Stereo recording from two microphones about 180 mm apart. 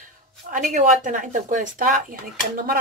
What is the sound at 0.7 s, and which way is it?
Speech, 45° right (ahead or behind).